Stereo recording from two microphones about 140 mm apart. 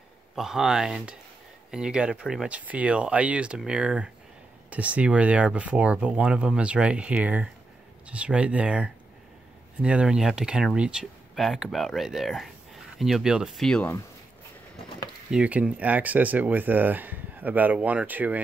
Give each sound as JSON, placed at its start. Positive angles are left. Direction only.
{"t": 0.4, "sound": "speech", "side_deg": -5}
{"t": 15.3, "sound": "speech", "side_deg": -10}